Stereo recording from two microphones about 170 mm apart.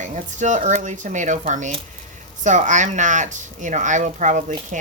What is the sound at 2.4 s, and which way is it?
Speech, 45° right (ahead or behind).